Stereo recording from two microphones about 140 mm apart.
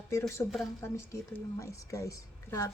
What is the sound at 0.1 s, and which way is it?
A woman's voice, 20° left (ahead or behind).